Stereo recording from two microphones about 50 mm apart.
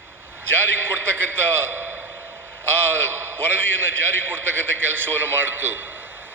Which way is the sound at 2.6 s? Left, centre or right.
Right.